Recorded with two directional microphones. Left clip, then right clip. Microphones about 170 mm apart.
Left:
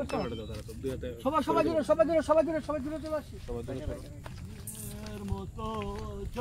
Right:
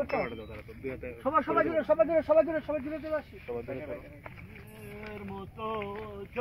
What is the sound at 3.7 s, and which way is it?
Speech, 15° right (ahead or behind).